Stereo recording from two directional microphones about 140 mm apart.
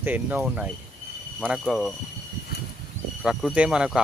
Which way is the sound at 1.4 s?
Centre (ahead or behind).